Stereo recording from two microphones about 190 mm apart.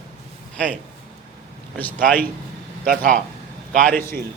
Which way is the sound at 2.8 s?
45° right (ahead or behind).